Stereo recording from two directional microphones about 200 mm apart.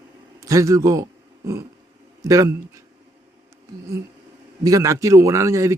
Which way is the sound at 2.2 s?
15° right (ahead or behind).